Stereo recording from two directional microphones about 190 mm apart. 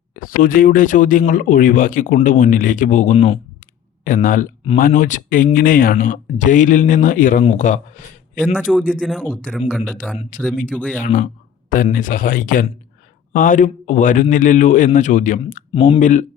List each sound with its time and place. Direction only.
0.1 s speech: 45° left (ahead or behind)
3.6 s clicking: 45° left (ahead or behind)
4.8 s speech: 45° left (ahead or behind)
8.9 s speech: centre (ahead or behind)
10.2 s speech: 40° left (ahead or behind)
10.8 s speech: 5° left (ahead or behind)
11.0 s speech: 45° left (ahead or behind)
15.7 s speech: 25° left (ahead or behind)
16.0 s speech: 40° left (ahead or behind)